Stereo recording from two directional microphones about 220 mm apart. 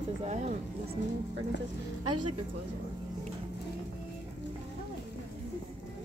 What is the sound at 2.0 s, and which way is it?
Speech, 90° right.